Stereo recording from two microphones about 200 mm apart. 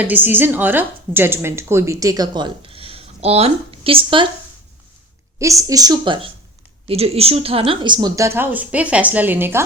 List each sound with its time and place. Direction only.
0.0 s speech: 10° right (ahead or behind); by 4.3 s 25° right (ahead or behind)
5.4 s speech: 15° right (ahead or behind)